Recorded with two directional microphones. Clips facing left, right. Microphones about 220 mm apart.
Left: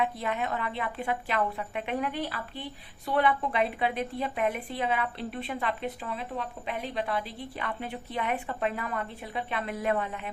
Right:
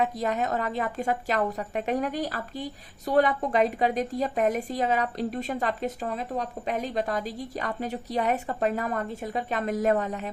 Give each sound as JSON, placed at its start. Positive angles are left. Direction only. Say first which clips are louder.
{"t": 0.0, "sound": "a woman's voice", "louder": "right 3 dB", "side_deg": -40}